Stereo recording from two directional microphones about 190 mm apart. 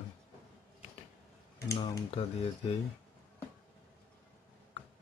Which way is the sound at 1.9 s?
30° left (ahead or behind).